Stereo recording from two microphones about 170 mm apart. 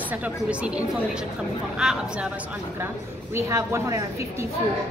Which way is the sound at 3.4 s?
15° right (ahead or behind).